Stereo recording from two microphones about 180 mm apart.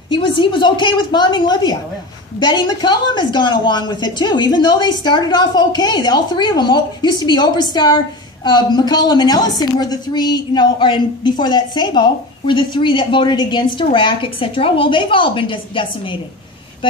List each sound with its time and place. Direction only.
0.1 s a woman's voice: 30° left (ahead or behind)